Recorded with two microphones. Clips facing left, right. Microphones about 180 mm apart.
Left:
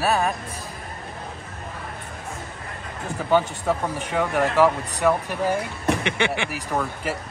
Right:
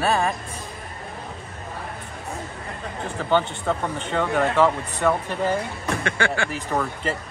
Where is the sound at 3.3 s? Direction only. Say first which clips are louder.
Left 1 dB; 5° left (ahead or behind).